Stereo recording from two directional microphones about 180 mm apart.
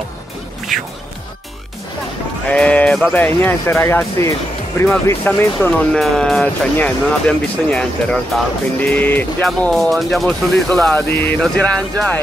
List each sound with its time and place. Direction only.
2.4 s speech: 5° left (ahead or behind)